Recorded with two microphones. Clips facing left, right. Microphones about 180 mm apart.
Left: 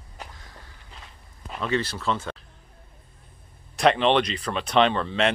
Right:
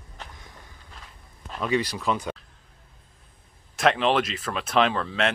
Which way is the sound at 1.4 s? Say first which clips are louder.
Right 1 dB; centre (ahead or behind).